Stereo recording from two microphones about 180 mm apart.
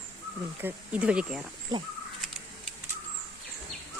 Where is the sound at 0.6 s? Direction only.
5° right (ahead or behind).